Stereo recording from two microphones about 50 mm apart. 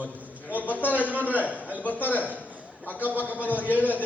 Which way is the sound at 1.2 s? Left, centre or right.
Left.